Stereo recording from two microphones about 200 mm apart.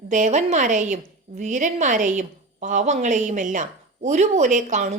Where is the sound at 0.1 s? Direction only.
35° right (ahead or behind).